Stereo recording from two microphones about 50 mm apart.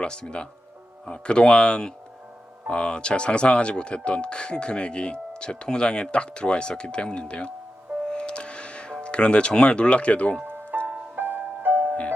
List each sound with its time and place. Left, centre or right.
0.0 s speech: centre
8.1 s music: centre
9.0 s speech: left
10.8 s music: right